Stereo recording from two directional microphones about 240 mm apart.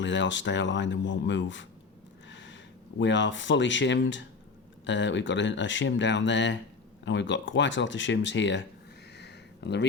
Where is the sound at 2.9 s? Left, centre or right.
Left.